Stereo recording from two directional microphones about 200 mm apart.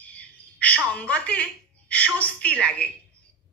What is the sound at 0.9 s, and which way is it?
A woman's voice, 5° left (ahead or behind).